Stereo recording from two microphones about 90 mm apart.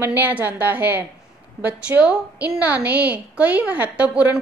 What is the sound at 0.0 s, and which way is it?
A woman's voice, 20° right (ahead or behind).